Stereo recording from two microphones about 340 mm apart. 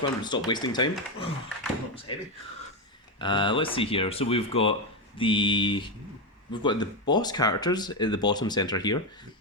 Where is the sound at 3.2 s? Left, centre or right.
Centre.